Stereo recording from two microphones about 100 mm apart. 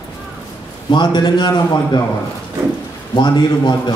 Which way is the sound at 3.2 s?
45° left (ahead or behind).